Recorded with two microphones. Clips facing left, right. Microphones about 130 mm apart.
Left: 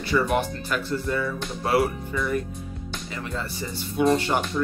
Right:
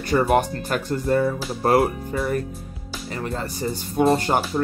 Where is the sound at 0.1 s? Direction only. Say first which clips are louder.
Right 4 dB; 45° right (ahead or behind).